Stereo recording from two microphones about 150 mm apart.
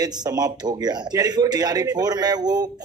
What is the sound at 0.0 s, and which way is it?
A man's voice, 25° right (ahead or behind).